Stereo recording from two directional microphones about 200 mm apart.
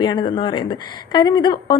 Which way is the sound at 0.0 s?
20° left (ahead or behind).